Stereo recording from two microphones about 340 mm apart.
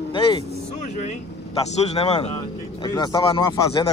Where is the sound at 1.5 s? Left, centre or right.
Centre.